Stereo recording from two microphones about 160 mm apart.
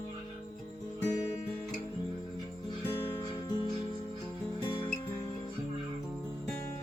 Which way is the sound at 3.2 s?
25° left (ahead or behind).